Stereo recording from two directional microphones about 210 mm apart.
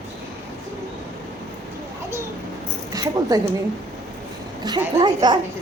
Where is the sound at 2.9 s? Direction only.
15° right (ahead or behind).